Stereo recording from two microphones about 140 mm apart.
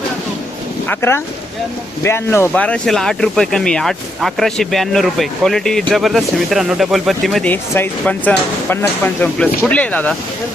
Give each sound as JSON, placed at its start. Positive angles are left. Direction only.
{"t": 0.9, "sound": "speech", "side_deg": 15}
{"t": 7.5, "sound": "speech", "side_deg": 15}